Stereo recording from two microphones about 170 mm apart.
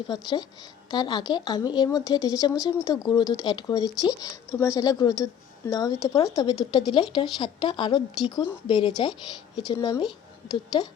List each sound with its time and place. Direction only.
0.1 s a woman's voice: 25° left (ahead or behind)